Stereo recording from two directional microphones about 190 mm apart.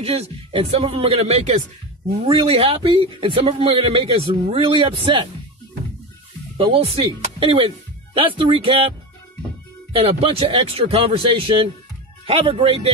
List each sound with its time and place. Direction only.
0.0 s a man's voice: 30° right (ahead or behind)
6.5 s speech: 30° right (ahead or behind)
9.9 s a man's voice: 25° right (ahead or behind)